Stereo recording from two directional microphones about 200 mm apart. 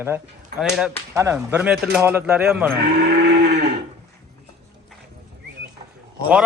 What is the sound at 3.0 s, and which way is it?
Cattle, 50° right (ahead or behind).